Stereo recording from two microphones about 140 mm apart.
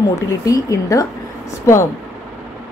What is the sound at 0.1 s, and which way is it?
Speech, 20° left (ahead or behind).